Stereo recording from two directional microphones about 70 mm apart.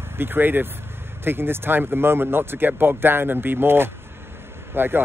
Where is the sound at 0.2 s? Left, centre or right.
Right.